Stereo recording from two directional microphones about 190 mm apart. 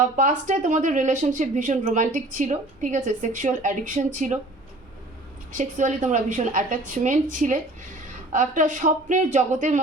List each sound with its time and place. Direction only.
0.2 s speech: 40° right (ahead or behind)
5.5 s speech: 40° right (ahead or behind)